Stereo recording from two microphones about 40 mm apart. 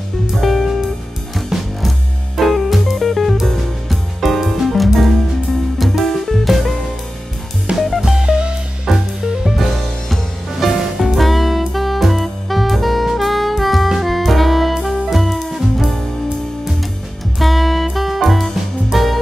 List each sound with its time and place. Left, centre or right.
0.4 s music: centre
7.7 s music: right
8.0 s music: centre
8.3 s music: right
8.8 s music: centre
9.6 s music: centre
17.4 s music: centre